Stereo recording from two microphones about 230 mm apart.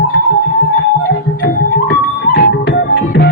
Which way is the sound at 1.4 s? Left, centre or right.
Left.